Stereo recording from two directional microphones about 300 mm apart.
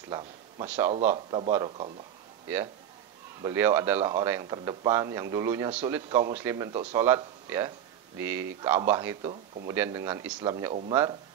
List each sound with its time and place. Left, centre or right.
0.1 s a sound: centre
0.7 s speech: centre
1.1 s a man's voice: centre
3.4 s speech: centre